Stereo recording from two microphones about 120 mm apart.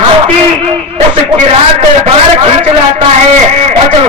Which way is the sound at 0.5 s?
55° right (ahead or behind).